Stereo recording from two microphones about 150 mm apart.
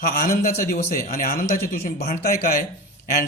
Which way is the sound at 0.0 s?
80° left.